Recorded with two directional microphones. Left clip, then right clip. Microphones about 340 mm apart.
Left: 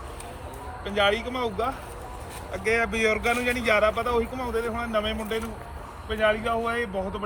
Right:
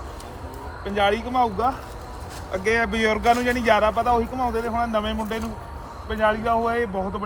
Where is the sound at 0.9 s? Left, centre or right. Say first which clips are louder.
Right 2 dB; centre.